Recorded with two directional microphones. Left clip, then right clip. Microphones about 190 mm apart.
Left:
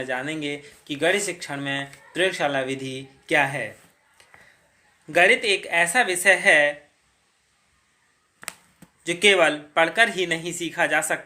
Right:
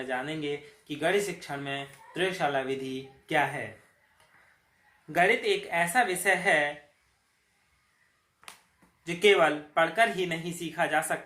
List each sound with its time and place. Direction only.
0.1 s speech: 35° left (ahead or behind)
5.1 s speech: 40° left (ahead or behind)
9.0 s speech: 40° left (ahead or behind)